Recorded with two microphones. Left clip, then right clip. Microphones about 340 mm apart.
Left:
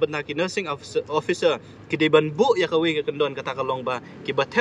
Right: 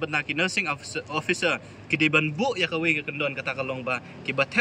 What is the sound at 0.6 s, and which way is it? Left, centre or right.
Speech, left.